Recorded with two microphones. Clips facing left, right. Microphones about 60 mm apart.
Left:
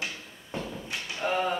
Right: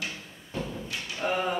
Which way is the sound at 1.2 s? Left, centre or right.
Centre.